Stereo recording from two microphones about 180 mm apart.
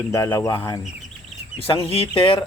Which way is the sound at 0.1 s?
15° left (ahead or behind).